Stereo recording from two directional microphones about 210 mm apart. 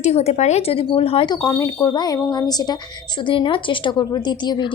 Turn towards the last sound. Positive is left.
turn(degrees=20)  # may be behind; listen again after turning